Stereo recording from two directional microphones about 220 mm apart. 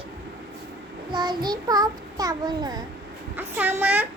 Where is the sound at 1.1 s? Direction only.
20° right (ahead or behind).